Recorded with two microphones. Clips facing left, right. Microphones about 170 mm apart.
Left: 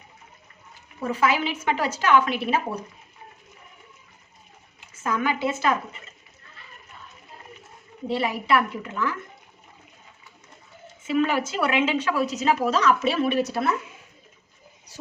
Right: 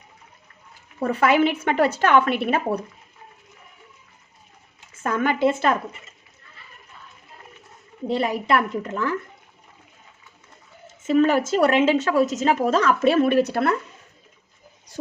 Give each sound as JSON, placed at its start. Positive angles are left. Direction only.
{"t": 1.0, "sound": "a woman's voice", "side_deg": -60}
{"t": 5.0, "sound": "a woman's voice", "side_deg": -55}
{"t": 8.1, "sound": "a woman's voice", "side_deg": -45}
{"t": 11.0, "sound": "a woman's voice", "side_deg": -45}